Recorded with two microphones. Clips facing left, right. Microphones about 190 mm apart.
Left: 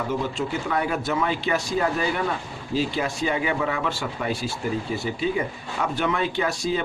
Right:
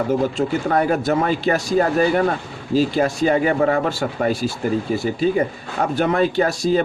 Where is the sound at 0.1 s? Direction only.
40° right (ahead or behind).